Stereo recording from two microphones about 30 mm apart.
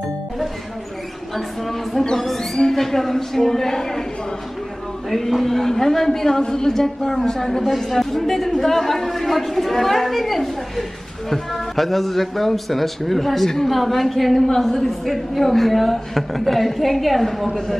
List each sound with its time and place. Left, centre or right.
1.3 s a woman's voice: centre
5.1 s a woman's voice: centre